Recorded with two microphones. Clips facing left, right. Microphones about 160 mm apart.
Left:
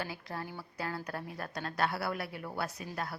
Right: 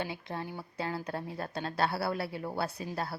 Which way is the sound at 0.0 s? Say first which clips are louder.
Right 3 dB; 20° right (ahead or behind).